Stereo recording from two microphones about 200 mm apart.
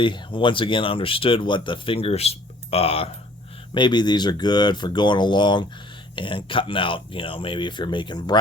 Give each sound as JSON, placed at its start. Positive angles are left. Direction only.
{"t": 0.0, "sound": "speech", "side_deg": 25}